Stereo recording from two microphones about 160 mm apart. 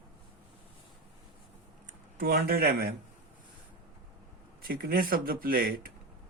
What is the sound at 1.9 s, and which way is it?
Speech, 65° right (ahead or behind).